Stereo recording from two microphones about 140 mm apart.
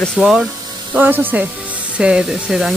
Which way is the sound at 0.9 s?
15° right (ahead or behind).